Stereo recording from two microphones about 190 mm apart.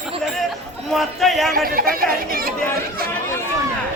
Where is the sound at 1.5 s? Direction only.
50° right (ahead or behind).